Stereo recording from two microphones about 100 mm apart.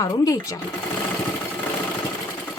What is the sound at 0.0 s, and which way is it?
Speech, 35° left (ahead or behind).